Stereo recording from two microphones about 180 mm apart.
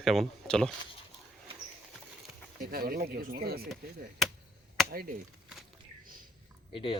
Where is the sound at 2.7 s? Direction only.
55° right (ahead or behind).